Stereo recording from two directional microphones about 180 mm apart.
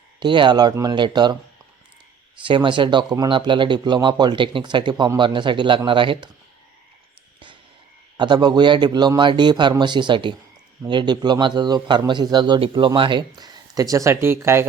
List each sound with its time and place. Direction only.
0.2 s speech: 25° right (ahead or behind)
2.4 s speech: 25° right (ahead or behind)
8.1 s speech: 25° right (ahead or behind)